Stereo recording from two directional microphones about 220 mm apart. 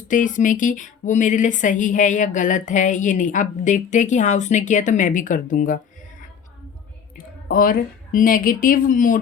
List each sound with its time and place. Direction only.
0.1 s speech: 35° left (ahead or behind)
7.4 s speech: 40° left (ahead or behind)